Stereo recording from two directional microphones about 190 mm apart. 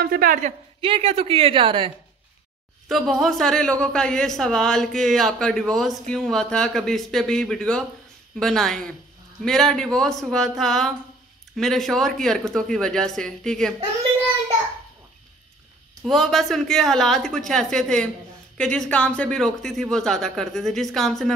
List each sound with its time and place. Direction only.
0.0 s a woman's voice: 50° right (ahead or behind)
0.7 s speech: 30° right (ahead or behind)
2.9 s speech: centre (ahead or behind)
16.1 s speech: centre (ahead or behind)